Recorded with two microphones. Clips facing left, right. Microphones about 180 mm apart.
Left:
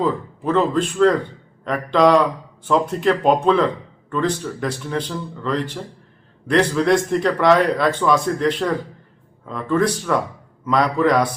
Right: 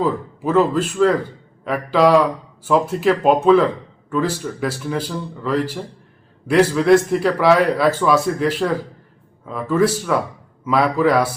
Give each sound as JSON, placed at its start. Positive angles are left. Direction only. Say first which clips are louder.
{"t": 0.0, "sound": "a man's voice", "louder": "right 1 dB", "side_deg": -5}